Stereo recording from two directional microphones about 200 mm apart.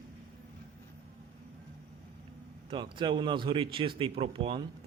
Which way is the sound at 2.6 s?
25° right (ahead or behind).